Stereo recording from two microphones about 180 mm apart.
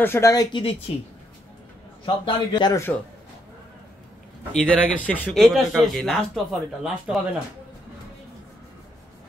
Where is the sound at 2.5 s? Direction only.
25° left (ahead or behind).